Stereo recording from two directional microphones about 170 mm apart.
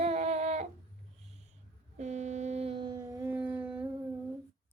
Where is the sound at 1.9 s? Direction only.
45° right (ahead or behind); by 3.9 s 10° right (ahead or behind).